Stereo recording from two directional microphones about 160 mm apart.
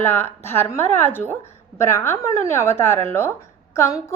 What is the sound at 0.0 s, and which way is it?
A woman's voice, 15° left (ahead or behind).